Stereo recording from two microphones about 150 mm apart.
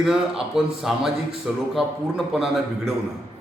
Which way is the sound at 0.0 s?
5° right (ahead or behind).